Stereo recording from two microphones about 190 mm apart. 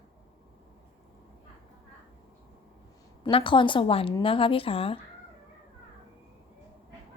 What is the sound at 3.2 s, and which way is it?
A woman's voice, 25° left (ahead or behind).